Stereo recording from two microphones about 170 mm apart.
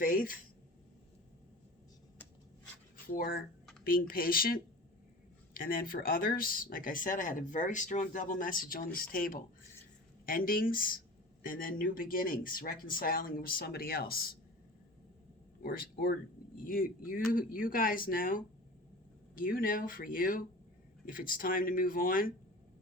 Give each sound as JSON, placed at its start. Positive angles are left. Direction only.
{"t": 0.0, "sound": "speech", "side_deg": 55}
{"t": 3.1, "sound": "speech", "side_deg": 55}
{"t": 15.6, "sound": "speech", "side_deg": 60}